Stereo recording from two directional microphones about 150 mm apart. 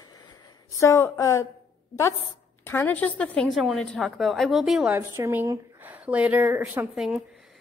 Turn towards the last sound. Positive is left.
turn(degrees=0)  # may be behind; listen again after turning